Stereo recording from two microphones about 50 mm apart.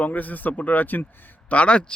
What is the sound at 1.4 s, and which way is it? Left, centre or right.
Speech, left.